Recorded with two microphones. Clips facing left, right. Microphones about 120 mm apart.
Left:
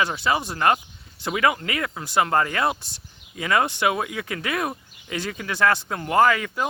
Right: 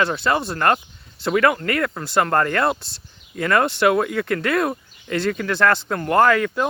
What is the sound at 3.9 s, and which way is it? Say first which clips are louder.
Speech: right 7 dB; 60° right (ahead or behind).